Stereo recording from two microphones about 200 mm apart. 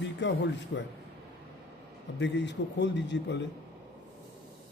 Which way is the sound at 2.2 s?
60° left (ahead or behind).